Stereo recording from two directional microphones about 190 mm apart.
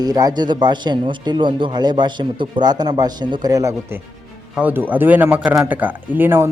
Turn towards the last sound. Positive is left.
turn(degrees=-10)  # may be behind; listen again after turning